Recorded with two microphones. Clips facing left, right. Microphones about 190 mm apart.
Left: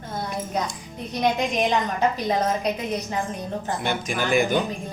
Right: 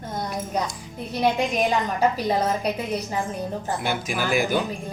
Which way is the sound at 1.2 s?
10° right (ahead or behind).